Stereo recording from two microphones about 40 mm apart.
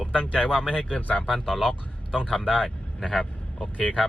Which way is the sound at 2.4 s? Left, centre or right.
Right.